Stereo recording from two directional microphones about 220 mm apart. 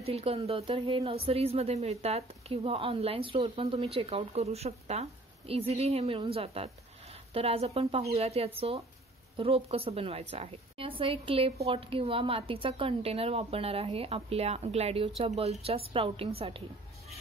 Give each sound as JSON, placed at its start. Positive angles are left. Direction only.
{"t": 0.0, "sound": "a woman's voice", "side_deg": -25}